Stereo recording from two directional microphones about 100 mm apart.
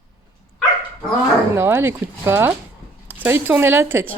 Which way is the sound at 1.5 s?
25° right (ahead or behind).